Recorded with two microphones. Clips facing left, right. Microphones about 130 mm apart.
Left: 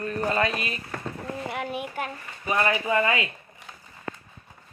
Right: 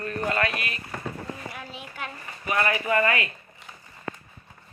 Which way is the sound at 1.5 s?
65° left (ahead or behind).